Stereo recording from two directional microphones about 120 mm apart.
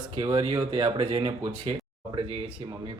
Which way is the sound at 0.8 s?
45° right (ahead or behind).